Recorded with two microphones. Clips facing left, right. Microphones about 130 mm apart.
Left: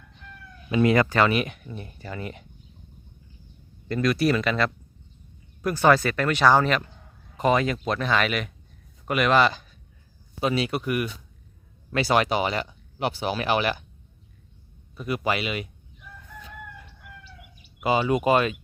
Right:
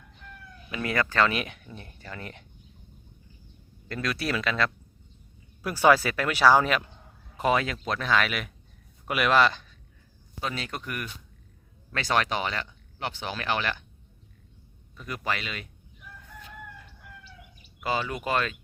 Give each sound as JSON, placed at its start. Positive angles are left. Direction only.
{"t": 0.7, "sound": "speech", "side_deg": 20}
{"t": 1.2, "sound": "speech", "side_deg": 0}
{"t": 3.8, "sound": "speech", "side_deg": 0}
{"t": 5.6, "sound": "speech", "side_deg": -10}
{"t": 10.4, "sound": "speech", "side_deg": 10}
{"t": 14.9, "sound": "speech", "side_deg": 10}
{"t": 16.8, "sound": "chicken", "side_deg": 0}
{"t": 17.7, "sound": "speech", "side_deg": 15}